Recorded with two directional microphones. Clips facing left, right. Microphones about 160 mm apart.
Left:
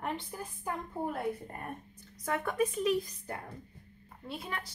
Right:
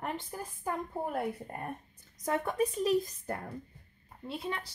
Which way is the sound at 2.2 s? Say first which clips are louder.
Right 1 dB; 30° right (ahead or behind).